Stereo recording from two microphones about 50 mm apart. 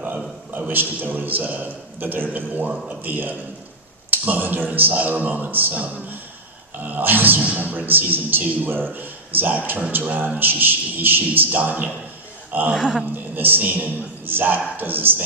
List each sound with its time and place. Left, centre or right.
0.0 s a man's voice: right
7.3 s a man's voice: right